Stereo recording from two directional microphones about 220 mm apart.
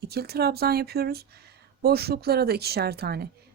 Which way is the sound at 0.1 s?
45° right (ahead or behind).